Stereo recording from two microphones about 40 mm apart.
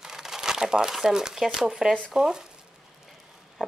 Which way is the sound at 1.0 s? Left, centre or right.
Centre.